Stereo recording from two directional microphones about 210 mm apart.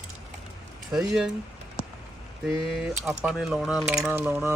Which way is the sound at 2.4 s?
Centre (ahead or behind).